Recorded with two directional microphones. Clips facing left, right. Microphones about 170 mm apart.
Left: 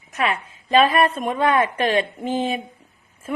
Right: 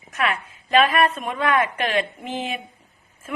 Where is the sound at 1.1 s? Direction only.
40° left (ahead or behind).